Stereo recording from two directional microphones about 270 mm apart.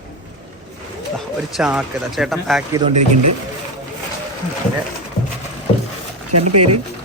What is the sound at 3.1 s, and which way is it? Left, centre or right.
Speech, right.